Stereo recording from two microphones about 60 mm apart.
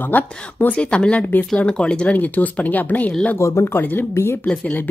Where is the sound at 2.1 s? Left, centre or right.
Left.